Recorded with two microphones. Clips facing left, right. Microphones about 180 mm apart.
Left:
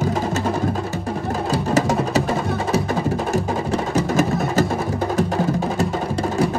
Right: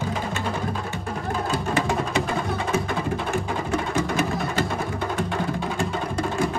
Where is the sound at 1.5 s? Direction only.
40° left (ahead or behind).